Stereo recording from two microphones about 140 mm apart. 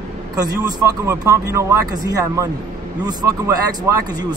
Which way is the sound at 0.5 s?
20° right (ahead or behind).